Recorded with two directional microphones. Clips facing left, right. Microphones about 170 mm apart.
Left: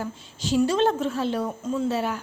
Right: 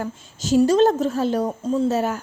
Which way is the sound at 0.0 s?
45° right (ahead or behind).